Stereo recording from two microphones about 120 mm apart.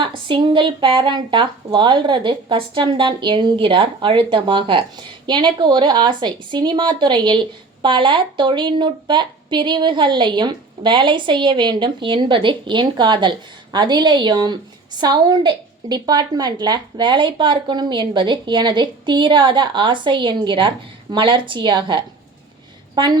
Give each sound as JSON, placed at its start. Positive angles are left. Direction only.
{"t": 0.0, "sound": "speech", "side_deg": -45}